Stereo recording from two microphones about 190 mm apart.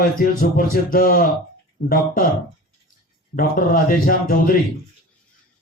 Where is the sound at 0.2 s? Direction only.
45° left (ahead or behind).